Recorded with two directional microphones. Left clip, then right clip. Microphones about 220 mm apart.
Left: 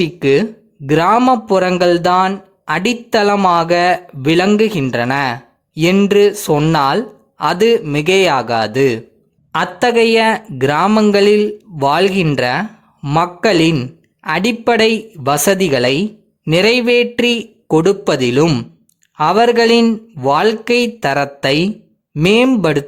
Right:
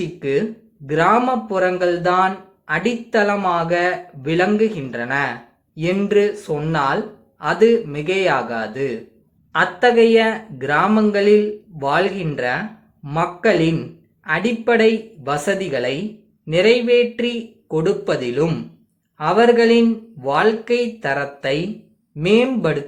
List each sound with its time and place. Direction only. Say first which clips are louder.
0.0 s speech: left 7 dB; 50° left (ahead or behind)